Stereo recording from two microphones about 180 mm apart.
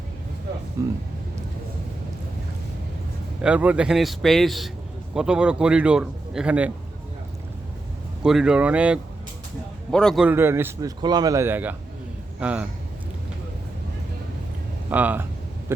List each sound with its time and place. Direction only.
0.8 s speech: 15° right (ahead or behind)
3.4 s a man's voice: 5° right (ahead or behind)
8.2 s a man's voice: 5° right (ahead or behind)
10.2 s speech: 15° right (ahead or behind)
14.8 s speech: 10° right (ahead or behind)